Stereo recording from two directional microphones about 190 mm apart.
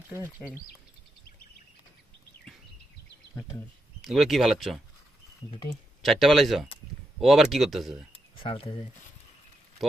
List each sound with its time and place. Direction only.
0.1 s speech: 10° right (ahead or behind)
4.0 s speech: centre (ahead or behind)
6.0 s speech: centre (ahead or behind)
8.4 s speech: 30° left (ahead or behind)